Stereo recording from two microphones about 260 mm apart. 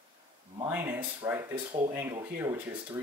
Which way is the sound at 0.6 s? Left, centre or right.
Centre.